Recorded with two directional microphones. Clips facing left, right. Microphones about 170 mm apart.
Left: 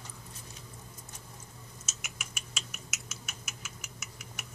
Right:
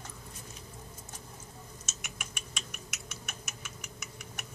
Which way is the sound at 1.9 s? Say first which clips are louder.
Right 2 dB; 5° left (ahead or behind).